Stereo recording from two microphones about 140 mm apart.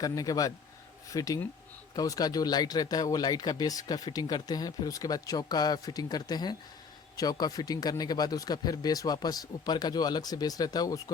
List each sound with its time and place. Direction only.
0.0 s speech: 25° left (ahead or behind)